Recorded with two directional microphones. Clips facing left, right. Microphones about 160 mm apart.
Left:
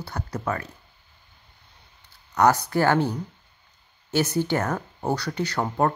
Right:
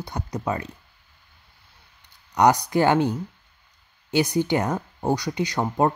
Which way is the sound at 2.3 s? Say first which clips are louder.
Right 2 dB; 15° right (ahead or behind).